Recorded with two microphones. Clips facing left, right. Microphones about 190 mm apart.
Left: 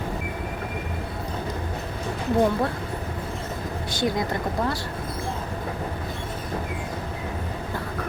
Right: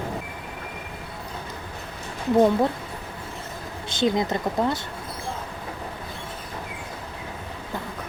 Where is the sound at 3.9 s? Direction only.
20° right (ahead or behind).